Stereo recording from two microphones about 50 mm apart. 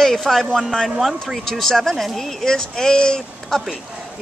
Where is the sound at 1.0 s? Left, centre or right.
Centre.